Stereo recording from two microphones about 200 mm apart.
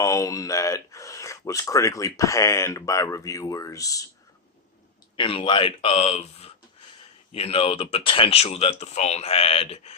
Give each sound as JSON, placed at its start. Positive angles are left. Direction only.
{"t": 0.0, "sound": "speech", "side_deg": 15}
{"t": 5.1, "sound": "speech", "side_deg": 25}